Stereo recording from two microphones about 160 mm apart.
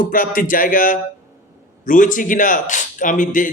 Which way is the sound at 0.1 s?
60° left (ahead or behind).